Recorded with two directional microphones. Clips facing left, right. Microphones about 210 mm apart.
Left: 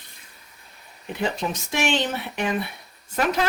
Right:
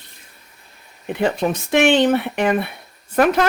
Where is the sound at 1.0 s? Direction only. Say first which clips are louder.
Right 7 dB; 60° right (ahead or behind).